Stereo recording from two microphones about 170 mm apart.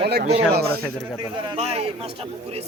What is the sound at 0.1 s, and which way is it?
Speech, 75° right (ahead or behind).